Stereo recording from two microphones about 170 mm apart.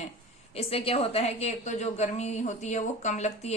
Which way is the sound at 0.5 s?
35° left (ahead or behind).